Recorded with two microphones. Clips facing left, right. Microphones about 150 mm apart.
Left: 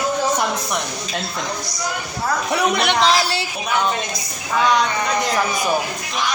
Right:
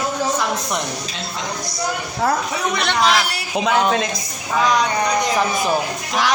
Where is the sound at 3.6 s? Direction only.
90° right.